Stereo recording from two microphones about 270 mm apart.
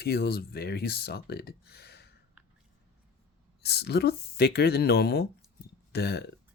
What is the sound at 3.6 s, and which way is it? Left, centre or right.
Speech, left.